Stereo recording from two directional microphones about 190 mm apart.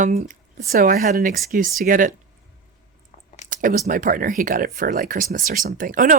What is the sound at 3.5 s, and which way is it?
A woman's voice, 45° right (ahead or behind).